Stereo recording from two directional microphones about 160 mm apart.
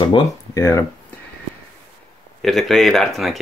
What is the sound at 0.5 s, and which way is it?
Speech, 15° left (ahead or behind).